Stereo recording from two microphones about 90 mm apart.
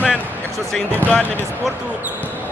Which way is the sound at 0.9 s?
15° left (ahead or behind).